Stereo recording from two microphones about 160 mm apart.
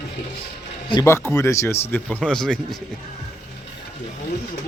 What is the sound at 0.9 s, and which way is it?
Speech, 20° left (ahead or behind).